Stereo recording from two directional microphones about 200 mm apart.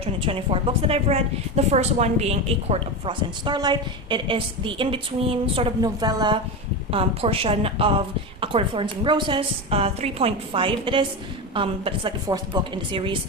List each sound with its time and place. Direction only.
0.0 s a woman's voice: 25° right (ahead or behind)